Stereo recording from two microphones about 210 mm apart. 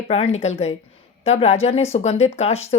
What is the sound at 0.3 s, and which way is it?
Speech, 30° left (ahead or behind).